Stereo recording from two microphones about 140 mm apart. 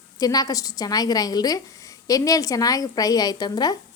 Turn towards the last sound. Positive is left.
turn(degrees=30)  # may be behind; listen again after turning